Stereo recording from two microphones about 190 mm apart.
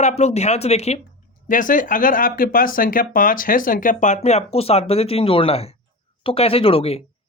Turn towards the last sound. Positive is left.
turn(degrees=30)  # may be behind; listen again after turning